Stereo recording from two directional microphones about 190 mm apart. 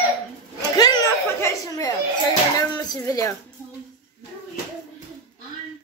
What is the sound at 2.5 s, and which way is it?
Speech, 20° left (ahead or behind).